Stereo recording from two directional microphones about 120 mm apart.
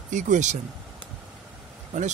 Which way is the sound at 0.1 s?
90° right.